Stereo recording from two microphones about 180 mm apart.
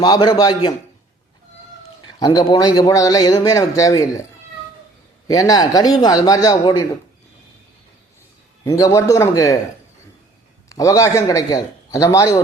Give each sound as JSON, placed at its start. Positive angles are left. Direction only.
{"t": 0.0, "sound": "a man's voice", "side_deg": 25}
{"t": 2.0, "sound": "a man's voice", "side_deg": 25}
{"t": 5.3, "sound": "a man's voice", "side_deg": 20}
{"t": 8.6, "sound": "a man's voice", "side_deg": 20}
{"t": 10.7, "sound": "a man's voice", "side_deg": 20}